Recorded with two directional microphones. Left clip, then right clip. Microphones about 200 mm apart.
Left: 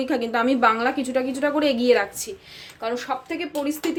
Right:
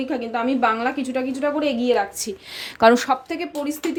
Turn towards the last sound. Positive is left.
turn(degrees=-15)  # may be behind; listen again after turning